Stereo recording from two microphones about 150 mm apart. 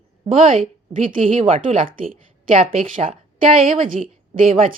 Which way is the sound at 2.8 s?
65° right (ahead or behind).